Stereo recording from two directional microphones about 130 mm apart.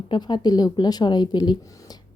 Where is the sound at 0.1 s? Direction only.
35° left (ahead or behind).